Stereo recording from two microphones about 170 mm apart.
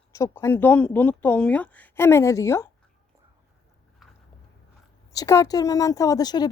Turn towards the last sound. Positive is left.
turn(degrees=25)  # may be behind; listen again after turning